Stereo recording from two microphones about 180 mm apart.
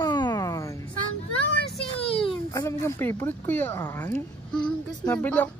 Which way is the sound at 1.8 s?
30° left (ahead or behind).